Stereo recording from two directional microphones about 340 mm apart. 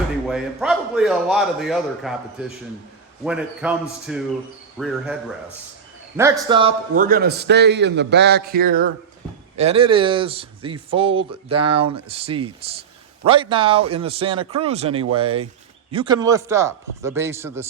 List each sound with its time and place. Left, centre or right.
0.3 s a man's voice: centre
3.2 s a man's voice: centre
6.1 s a man's voice: centre